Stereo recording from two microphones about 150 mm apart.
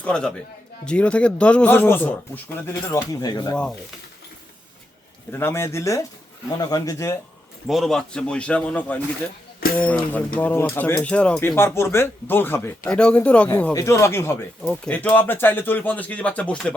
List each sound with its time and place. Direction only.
0.0 s speech: 5° left (ahead or behind)
2.9 s speech: 25° left (ahead or behind)
3.5 s speech: 5° left (ahead or behind)
5.3 s speech: 15° left (ahead or behind)
7.7 s speech: centre (ahead or behind)
13.7 s speech: 20° left (ahead or behind)